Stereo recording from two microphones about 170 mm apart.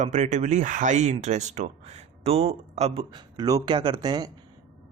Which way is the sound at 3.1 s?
20° right (ahead or behind).